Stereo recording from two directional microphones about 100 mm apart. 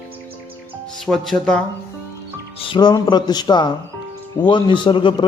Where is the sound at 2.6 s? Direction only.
50° left (ahead or behind).